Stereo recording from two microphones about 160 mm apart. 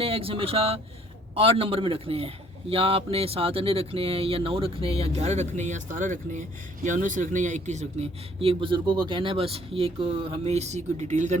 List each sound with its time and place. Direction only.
0.0 s a man's voice: 35° right (ahead or behind)